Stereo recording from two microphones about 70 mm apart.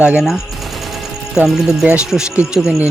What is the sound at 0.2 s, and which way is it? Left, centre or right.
Speech, centre.